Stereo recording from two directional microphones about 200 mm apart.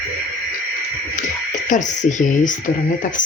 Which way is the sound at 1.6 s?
40° left (ahead or behind).